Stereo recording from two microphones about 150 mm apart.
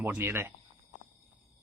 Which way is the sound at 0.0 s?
15° right (ahead or behind).